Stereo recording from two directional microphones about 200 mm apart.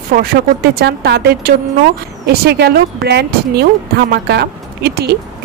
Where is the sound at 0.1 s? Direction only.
45° right (ahead or behind).